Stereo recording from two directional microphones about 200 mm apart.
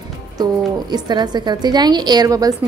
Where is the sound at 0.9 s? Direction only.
20° right (ahead or behind).